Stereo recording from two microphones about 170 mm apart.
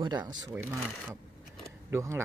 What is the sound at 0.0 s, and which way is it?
Speech, 25° right (ahead or behind).